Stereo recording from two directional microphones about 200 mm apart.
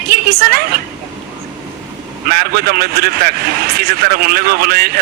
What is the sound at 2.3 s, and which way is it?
A man's voice, 50° right (ahead or behind).